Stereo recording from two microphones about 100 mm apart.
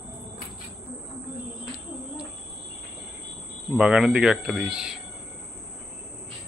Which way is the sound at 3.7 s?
10° right (ahead or behind).